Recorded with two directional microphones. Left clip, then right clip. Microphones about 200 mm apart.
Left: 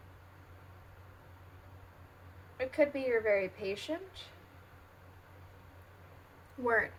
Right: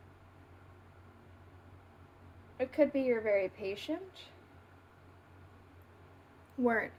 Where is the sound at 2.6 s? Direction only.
30° right (ahead or behind).